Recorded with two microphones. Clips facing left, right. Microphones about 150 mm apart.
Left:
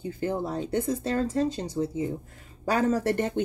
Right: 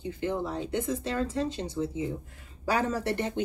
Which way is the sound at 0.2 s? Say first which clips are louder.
Left 2 dB; 40° left (ahead or behind).